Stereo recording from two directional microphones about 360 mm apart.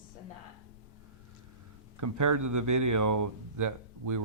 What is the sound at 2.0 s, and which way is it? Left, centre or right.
Speech, right.